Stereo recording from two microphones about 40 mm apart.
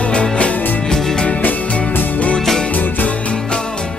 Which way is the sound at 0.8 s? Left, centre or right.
Centre.